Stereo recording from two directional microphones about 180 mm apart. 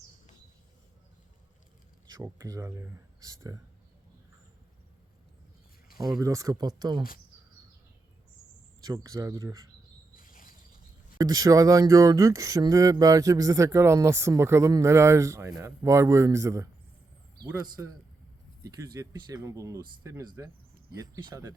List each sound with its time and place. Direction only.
2.0 s speech: 20° right (ahead or behind)
6.0 s speech: 20° right (ahead or behind)
8.8 s speech: 20° right (ahead or behind)
10.2 s pulleys: 50° left (ahead or behind)
11.2 s speech: 20° right (ahead or behind)
17.8 s speech: 15° right (ahead or behind)
18.9 s speech: 20° right (ahead or behind)